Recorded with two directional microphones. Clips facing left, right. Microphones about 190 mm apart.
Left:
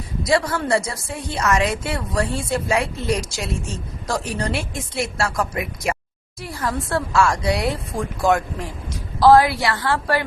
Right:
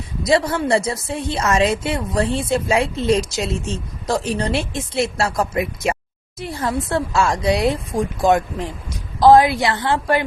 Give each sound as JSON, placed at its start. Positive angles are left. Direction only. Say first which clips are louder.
{"t": 0.3, "sound": "a woman's voice", "louder": "right 3 dB", "side_deg": -25}